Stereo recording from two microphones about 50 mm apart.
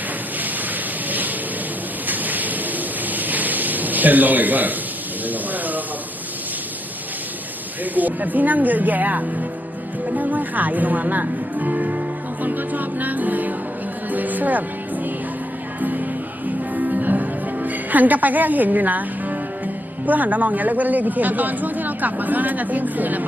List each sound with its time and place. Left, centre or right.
2.0 s rain: right
3.1 s a sound: right
7.9 s a woman's voice: right
12.4 s music: right
15.8 s music: right